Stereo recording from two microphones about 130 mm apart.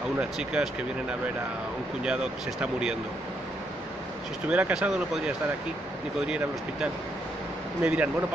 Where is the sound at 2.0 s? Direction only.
5° right (ahead or behind).